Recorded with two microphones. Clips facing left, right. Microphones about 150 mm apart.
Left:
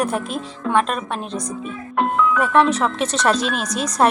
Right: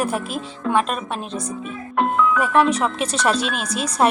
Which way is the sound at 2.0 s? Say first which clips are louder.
Even; centre (ahead or behind).